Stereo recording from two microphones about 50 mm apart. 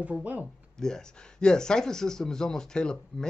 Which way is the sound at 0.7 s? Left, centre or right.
Centre.